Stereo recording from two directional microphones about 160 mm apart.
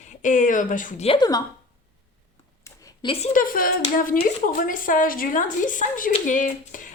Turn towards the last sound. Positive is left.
turn(degrees=55)  # may be behind; listen again after turning